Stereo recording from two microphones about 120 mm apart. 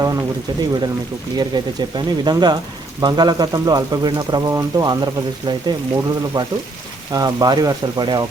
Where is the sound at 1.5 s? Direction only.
35° right (ahead or behind).